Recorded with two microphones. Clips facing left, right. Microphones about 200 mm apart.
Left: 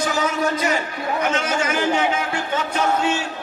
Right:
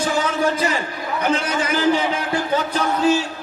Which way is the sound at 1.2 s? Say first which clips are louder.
Right 4 dB; 35° right (ahead or behind).